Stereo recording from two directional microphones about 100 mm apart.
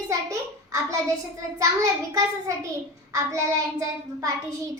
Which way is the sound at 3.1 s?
30° right (ahead or behind).